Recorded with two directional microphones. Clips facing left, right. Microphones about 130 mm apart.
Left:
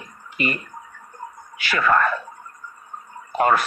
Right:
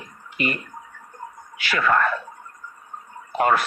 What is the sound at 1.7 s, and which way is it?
Speech, 40° left (ahead or behind).